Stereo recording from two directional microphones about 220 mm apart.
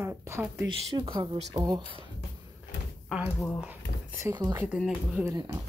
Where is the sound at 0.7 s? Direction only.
25° right (ahead or behind).